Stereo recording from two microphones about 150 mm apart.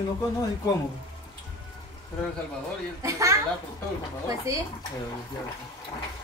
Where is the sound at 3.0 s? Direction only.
20° right (ahead or behind).